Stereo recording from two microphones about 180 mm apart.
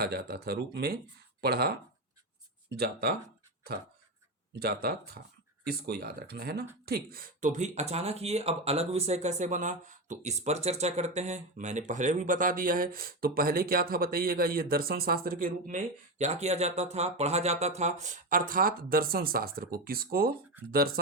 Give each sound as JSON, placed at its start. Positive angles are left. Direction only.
{"t": 0.0, "sound": "speech", "side_deg": -60}
{"t": 4.6, "sound": "speech", "side_deg": -60}